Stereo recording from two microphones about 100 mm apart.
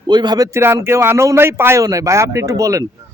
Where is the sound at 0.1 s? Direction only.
45° right (ahead or behind); by 1.8 s 25° right (ahead or behind).